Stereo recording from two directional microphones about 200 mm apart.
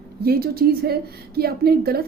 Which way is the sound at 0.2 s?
50° right (ahead or behind).